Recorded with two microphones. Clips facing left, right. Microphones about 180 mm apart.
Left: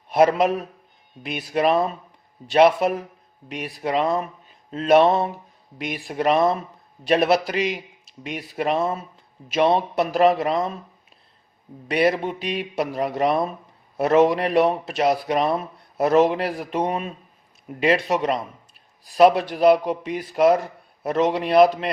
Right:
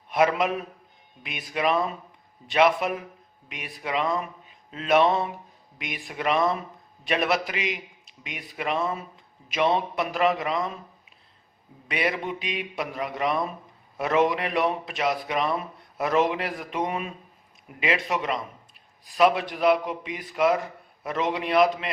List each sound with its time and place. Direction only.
0.1 s a man's voice: 40° left (ahead or behind)
11.9 s a man's voice: 40° left (ahead or behind)